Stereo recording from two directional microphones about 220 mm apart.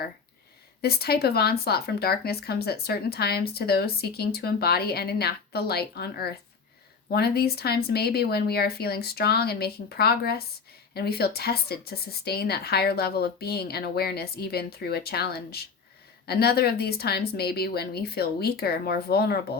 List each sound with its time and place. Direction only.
0.8 s speech: 45° left (ahead or behind)